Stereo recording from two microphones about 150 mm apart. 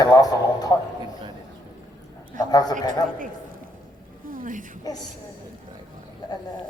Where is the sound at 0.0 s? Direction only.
25° left (ahead or behind).